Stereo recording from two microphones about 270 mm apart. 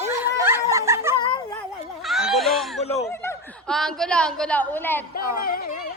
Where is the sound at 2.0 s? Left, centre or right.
Centre.